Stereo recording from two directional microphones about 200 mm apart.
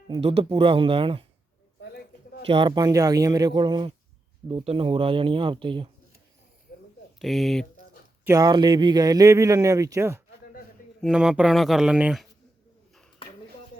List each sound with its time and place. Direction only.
0.1 s speech: 30° right (ahead or behind)
2.5 s speech: 25° right (ahead or behind)
7.2 s speech: centre (ahead or behind)
8.2 s speech: 15° right (ahead or behind)
11.0 s speech: 5° right (ahead or behind)